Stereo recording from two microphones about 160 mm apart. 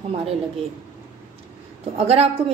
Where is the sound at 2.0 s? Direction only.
40° right (ahead or behind).